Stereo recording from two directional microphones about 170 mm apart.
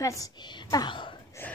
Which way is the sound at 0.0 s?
20° left (ahead or behind).